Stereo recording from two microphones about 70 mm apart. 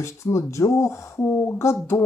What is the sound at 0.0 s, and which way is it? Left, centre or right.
Speech, left.